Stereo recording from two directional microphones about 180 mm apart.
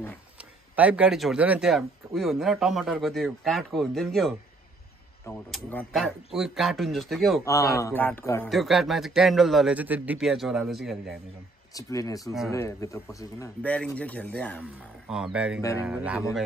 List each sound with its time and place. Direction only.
0.4 s speech: 5° right (ahead or behind)
5.5 s speech: 5° left (ahead or behind)
7.4 s speech: 20° left (ahead or behind)
8.5 s speech: centre (ahead or behind)
11.7 s speech: 20° left (ahead or behind)
14.6 s speech: 5° right (ahead or behind)